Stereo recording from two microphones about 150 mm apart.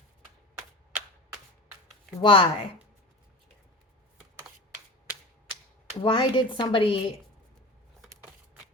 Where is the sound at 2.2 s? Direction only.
35° left (ahead or behind).